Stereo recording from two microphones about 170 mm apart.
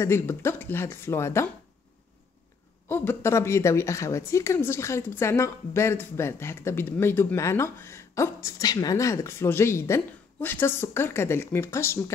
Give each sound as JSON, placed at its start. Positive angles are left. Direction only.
{"t": 0.0, "sound": "a woman's voice", "side_deg": 15}
{"t": 2.9, "sound": "a woman's voice", "side_deg": 15}